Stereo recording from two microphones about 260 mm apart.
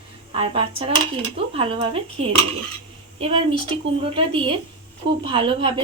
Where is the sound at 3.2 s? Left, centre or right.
Right.